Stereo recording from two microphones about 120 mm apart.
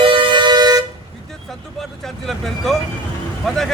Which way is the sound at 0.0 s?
45° right (ahead or behind).